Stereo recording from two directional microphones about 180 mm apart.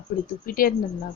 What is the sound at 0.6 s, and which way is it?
Speech, 55° left (ahead or behind).